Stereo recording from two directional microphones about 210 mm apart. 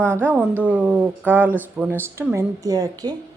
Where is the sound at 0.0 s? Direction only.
10° right (ahead or behind).